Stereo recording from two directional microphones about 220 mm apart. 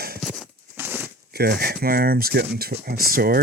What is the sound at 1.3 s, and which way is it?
Speech, 45° right (ahead or behind).